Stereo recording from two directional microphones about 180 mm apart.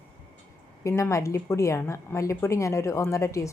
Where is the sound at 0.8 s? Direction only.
15° left (ahead or behind).